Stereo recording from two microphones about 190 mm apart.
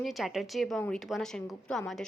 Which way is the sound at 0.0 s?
Centre (ahead or behind).